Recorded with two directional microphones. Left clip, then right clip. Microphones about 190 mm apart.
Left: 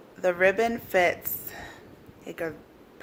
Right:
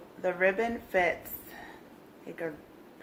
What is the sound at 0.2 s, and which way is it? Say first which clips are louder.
Speech: left 5 dB; 55° left (ahead or behind).